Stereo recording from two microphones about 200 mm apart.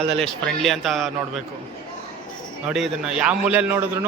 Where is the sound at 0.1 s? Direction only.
Centre (ahead or behind).